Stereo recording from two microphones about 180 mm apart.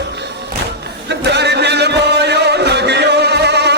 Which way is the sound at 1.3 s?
70° right (ahead or behind).